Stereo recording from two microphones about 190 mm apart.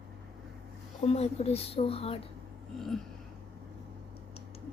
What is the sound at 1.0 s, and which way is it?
Speech, 30° left (ahead or behind).